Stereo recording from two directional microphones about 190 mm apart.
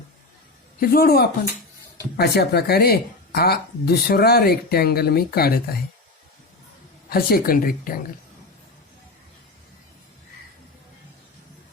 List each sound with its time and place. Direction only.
0.8 s speech: 50° left (ahead or behind)
7.1 s speech: 50° left (ahead or behind)